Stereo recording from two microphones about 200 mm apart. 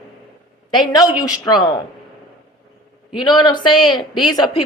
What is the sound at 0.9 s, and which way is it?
Speech, 20° left (ahead or behind).